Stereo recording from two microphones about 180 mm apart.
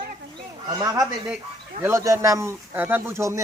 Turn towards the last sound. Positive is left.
turn(degrees=-15)  # may be behind; listen again after turning